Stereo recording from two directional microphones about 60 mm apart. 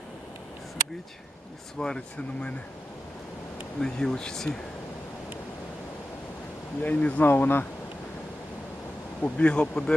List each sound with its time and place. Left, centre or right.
1.8 s speech: centre
3.8 s speech: centre
6.8 s speech: left
9.2 s speech: centre